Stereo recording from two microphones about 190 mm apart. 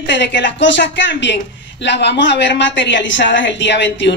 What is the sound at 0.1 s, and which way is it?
A woman's voice, 70° left (ahead or behind).